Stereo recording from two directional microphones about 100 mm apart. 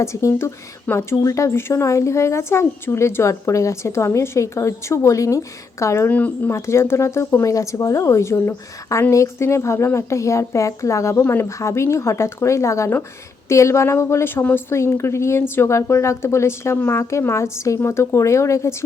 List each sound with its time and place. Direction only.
0.0 s speech: 30° left (ahead or behind)
6.1 s speech: 15° left (ahead or behind)